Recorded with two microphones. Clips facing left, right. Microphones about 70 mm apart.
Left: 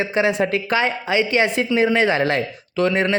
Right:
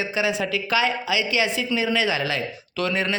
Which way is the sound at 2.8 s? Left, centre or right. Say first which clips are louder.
Left 6 dB; left.